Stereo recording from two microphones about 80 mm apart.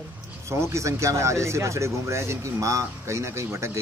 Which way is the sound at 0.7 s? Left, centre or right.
Right.